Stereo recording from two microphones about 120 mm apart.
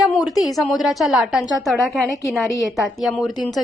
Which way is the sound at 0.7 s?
Centre (ahead or behind).